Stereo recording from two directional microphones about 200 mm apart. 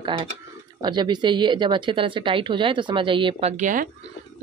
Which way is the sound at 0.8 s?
20° right (ahead or behind).